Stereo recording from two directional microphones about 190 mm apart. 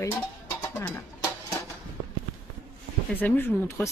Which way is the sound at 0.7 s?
10° left (ahead or behind).